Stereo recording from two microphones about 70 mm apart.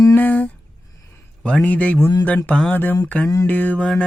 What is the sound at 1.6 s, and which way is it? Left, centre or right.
Mantra, left.